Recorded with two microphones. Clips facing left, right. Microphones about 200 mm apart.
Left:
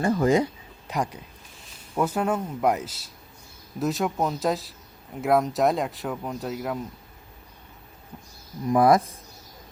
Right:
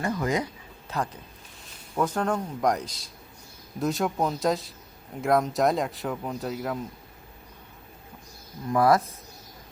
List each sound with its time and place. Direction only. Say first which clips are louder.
0.0 s speech: left 6 dB; 30° left (ahead or behind)
0.9 s speech: left 2 dB; 15° left (ahead or behind)
8.7 s speech: left 3 dB; 15° left (ahead or behind)